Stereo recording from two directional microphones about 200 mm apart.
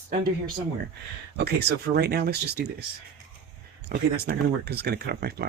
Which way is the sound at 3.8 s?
55° right (ahead or behind).